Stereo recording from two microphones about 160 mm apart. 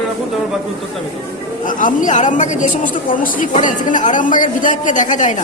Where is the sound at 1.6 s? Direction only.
55° left (ahead or behind).